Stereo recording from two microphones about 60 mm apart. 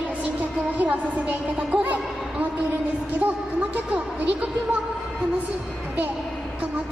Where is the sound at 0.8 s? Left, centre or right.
Right.